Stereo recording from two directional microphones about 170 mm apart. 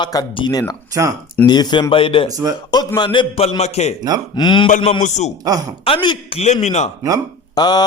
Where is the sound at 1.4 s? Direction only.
25° left (ahead or behind).